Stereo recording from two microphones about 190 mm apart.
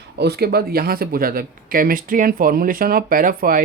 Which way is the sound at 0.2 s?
60° right (ahead or behind).